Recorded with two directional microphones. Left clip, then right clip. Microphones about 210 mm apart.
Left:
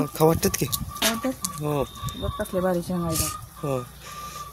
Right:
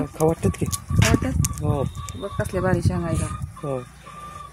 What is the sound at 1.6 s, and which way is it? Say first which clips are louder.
Speech: left 2 dB; 10° left (ahead or behind).